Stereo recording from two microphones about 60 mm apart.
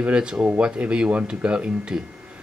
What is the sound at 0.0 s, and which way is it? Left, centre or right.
Speech, centre.